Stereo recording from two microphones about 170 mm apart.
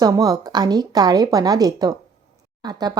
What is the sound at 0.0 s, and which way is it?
A woman's voice, 20° right (ahead or behind).